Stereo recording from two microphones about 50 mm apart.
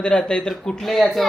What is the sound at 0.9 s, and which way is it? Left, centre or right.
Speech, centre.